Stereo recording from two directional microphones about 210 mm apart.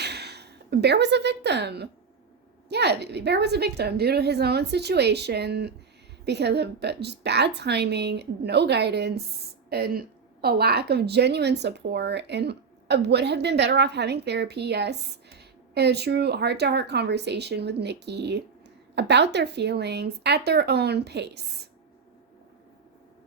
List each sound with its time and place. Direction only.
0.0 s a woman's voice: 50° right (ahead or behind)